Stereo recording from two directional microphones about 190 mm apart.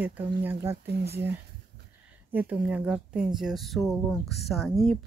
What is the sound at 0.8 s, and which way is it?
Speech, 60° right (ahead or behind).